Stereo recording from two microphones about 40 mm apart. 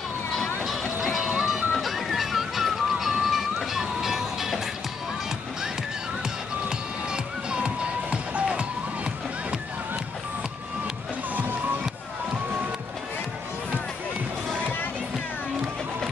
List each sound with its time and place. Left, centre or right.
1.0 s music: centre
6.7 s music: right